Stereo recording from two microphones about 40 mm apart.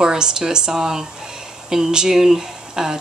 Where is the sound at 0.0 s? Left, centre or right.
Centre.